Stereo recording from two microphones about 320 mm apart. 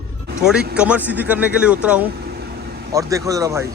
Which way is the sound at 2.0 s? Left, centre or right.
Right.